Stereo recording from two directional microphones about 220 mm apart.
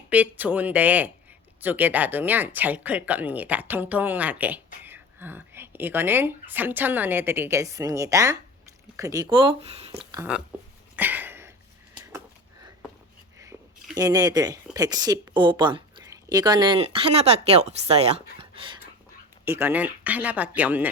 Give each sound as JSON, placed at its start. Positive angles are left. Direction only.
{"t": 0.1, "sound": "speech", "side_deg": -5}
{"t": 10.3, "sound": "speech", "side_deg": -5}
{"t": 10.9, "sound": "a sound", "side_deg": -10}
{"t": 13.5, "sound": "a sound", "side_deg": -10}
{"t": 13.9, "sound": "speech", "side_deg": -15}
{"t": 19.5, "sound": "speech", "side_deg": -10}